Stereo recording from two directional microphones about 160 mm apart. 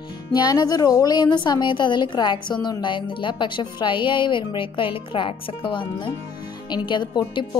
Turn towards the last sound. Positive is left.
turn(degrees=30)  # may be behind; listen again after turning